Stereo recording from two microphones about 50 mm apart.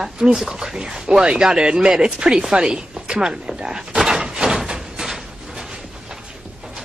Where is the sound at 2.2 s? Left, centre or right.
Centre.